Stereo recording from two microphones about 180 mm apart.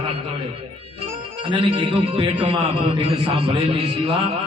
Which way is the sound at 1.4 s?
30° right (ahead or behind).